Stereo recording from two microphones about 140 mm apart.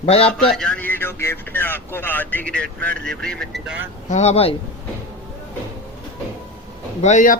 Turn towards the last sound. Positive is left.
turn(degrees=60)  # may be behind; listen again after turning